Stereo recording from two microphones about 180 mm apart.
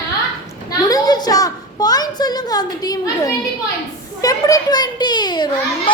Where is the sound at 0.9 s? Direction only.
20° left (ahead or behind).